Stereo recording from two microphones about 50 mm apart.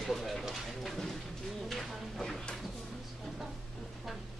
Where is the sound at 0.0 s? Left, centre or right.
Centre.